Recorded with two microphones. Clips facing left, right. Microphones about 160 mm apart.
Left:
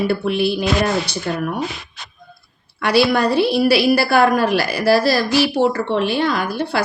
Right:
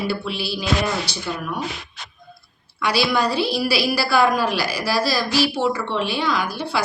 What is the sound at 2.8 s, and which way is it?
A woman's voice, 60° left (ahead or behind).